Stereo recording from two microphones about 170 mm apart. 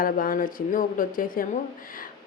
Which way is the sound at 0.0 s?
55° left (ahead or behind).